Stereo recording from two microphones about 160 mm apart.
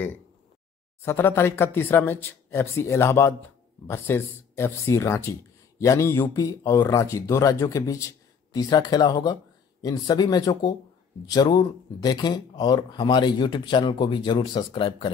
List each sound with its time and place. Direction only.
1.0 s speech: 15° left (ahead or behind); by 15.0 s 35° left (ahead or behind)